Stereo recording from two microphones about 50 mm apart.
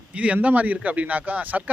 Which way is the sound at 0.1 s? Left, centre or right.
Right.